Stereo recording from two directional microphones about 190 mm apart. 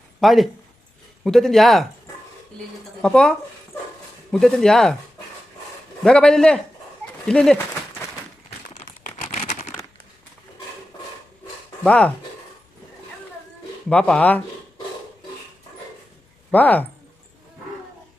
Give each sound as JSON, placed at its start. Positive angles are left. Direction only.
{"t": 0.2, "sound": "speech", "side_deg": 0}
{"t": 3.0, "sound": "speech", "side_deg": 5}
{"t": 6.0, "sound": "speech", "side_deg": 5}
{"t": 7.3, "sound": "a sound", "side_deg": 5}
{"t": 8.8, "sound": "a sound", "side_deg": 40}
{"t": 11.8, "sound": "speech", "side_deg": 5}
{"t": 13.9, "sound": "speech", "side_deg": 10}
{"t": 16.5, "sound": "speech", "side_deg": 10}